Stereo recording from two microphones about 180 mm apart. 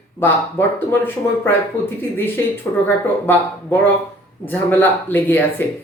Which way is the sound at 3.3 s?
10° left (ahead or behind).